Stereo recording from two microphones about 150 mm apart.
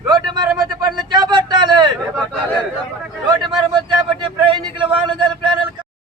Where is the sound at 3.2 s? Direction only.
30° right (ahead or behind).